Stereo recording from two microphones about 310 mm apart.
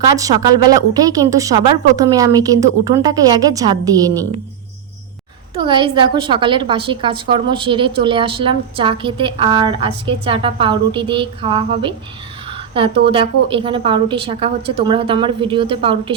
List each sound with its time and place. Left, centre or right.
0.2 s a woman's voice: centre
5.5 s a woman's voice: centre
12.5 s a sound: centre
13.1 s a woman's voice: centre